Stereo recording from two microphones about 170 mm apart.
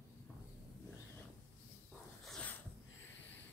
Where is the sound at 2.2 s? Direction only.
5° left (ahead or behind).